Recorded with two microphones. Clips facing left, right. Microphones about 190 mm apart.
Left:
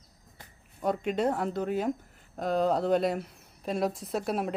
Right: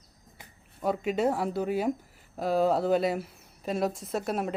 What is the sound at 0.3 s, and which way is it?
Speech, 5° right (ahead or behind).